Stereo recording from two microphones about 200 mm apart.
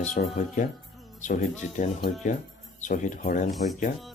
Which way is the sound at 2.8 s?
40° left (ahead or behind).